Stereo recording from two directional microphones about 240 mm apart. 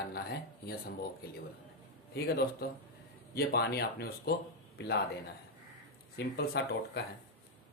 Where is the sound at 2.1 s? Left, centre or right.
Left.